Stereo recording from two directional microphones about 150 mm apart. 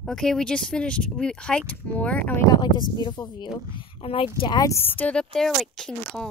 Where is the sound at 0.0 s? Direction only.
5° left (ahead or behind).